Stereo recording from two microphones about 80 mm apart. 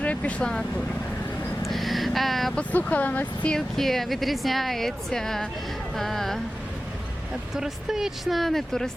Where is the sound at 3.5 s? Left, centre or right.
Centre.